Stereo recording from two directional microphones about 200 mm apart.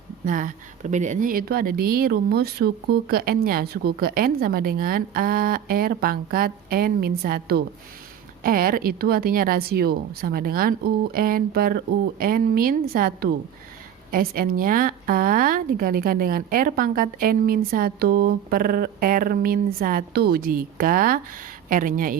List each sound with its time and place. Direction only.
0.3 s a woman's voice: 40° right (ahead or behind)